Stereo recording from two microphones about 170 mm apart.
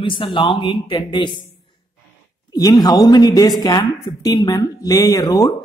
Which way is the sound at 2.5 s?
20° left (ahead or behind).